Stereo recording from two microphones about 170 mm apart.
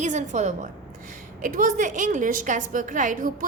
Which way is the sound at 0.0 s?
45° right (ahead or behind).